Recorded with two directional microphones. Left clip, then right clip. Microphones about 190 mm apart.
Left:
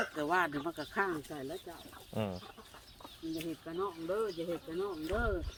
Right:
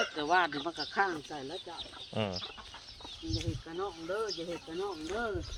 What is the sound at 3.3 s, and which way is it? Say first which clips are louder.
Speech: even; 55° left (ahead or behind).